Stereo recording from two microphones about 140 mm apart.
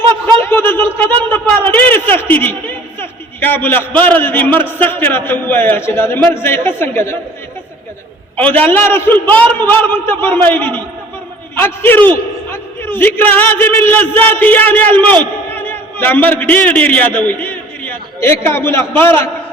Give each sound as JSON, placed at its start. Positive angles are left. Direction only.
{"t": 0.4, "sound": "a sound", "side_deg": 15}
{"t": 4.0, "sound": "a man's voice", "side_deg": 15}
{"t": 8.4, "sound": "a man's voice", "side_deg": 10}